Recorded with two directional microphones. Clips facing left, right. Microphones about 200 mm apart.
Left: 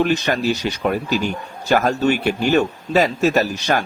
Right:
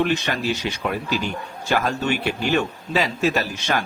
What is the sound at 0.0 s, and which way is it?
A man's voice, 40° left (ahead or behind).